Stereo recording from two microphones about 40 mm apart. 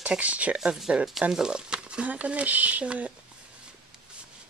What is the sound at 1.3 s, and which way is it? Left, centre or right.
Speech, centre.